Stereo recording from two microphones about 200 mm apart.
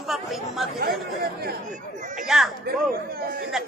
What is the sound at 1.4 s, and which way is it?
Speech, 45° right (ahead or behind).